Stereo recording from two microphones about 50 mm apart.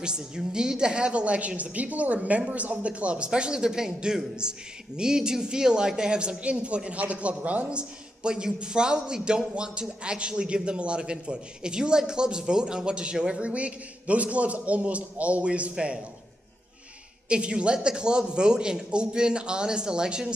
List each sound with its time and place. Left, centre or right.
0.5 s a man's voice: centre
17.3 s speech: right